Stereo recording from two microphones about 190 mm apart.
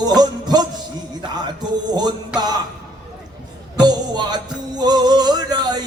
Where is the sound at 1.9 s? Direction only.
20° right (ahead or behind).